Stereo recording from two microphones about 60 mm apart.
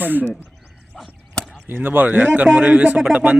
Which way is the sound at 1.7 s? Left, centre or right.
Right.